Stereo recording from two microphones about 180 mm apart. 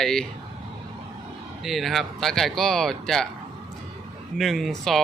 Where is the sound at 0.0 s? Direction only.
5° left (ahead or behind).